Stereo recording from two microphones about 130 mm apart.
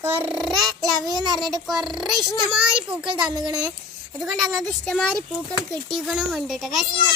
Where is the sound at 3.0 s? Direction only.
35° right (ahead or behind).